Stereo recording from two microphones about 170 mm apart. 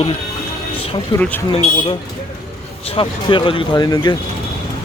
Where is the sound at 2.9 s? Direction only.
30° left (ahead or behind).